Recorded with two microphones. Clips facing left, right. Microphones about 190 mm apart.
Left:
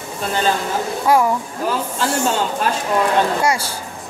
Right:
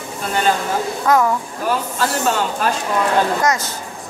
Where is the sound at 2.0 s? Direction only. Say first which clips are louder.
Left 1 dB; 30° left (ahead or behind).